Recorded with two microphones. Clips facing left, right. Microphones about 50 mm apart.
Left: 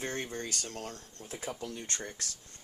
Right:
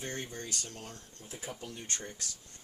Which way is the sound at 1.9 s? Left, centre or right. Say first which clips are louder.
Left 2 dB; left.